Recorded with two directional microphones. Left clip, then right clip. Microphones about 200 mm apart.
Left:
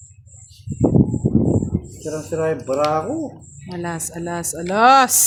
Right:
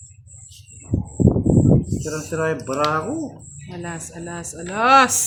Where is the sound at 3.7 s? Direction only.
50° left (ahead or behind).